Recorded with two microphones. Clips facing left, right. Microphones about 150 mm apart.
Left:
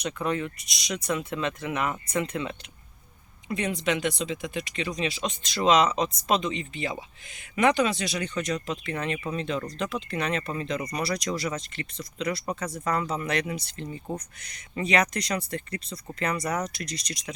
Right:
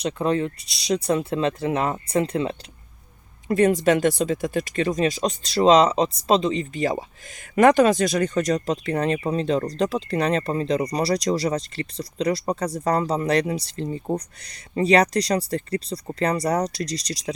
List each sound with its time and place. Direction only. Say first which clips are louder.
0.0 s speech: right 6 dB; 30° right (ahead or behind)
3.5 s speech: right 10 dB; 45° right (ahead or behind)